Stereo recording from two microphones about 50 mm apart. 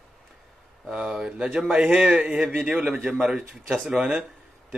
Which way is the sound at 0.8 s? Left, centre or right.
Centre.